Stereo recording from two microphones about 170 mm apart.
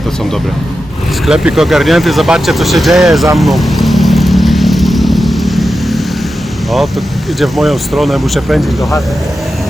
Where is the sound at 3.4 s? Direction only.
Centre (ahead or behind).